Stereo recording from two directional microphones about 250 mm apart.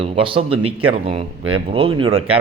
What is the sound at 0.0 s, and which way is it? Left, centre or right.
Speech, right.